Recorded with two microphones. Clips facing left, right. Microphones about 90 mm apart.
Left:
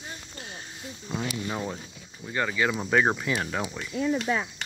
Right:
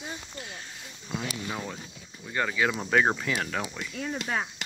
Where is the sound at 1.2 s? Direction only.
20° left (ahead or behind).